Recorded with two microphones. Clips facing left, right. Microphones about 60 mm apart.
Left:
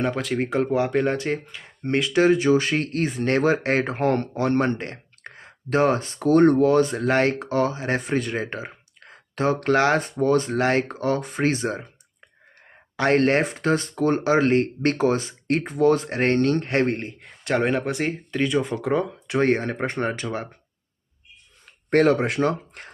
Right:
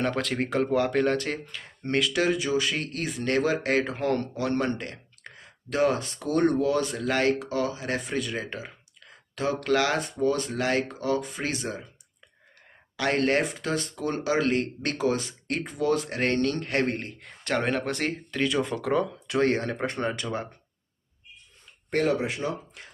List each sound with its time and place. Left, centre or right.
0.0 s speech: centre; by 11.9 s left
13.0 s speech: left
17.2 s speech: centre
19.7 s speech: left
20.2 s speech: centre
21.8 s speech: left